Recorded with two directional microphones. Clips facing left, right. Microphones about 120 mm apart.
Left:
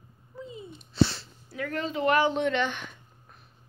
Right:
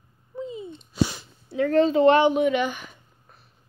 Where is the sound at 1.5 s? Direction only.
30° right (ahead or behind).